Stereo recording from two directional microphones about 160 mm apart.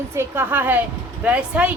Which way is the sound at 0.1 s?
15° right (ahead or behind).